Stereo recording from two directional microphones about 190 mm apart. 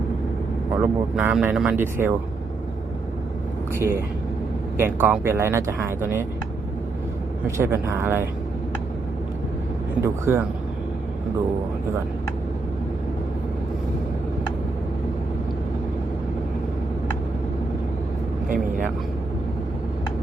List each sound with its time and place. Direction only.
0.8 s speech: 5° right (ahead or behind)
4.8 s speech: 10° right (ahead or behind)
7.4 s speech: 15° right (ahead or behind)
10.0 s speech: 15° right (ahead or behind)
18.4 s speech: 45° right (ahead or behind)